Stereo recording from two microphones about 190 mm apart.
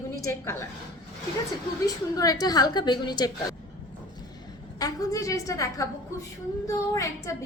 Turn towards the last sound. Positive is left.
turn(degrees=15)  # may be behind; listen again after turning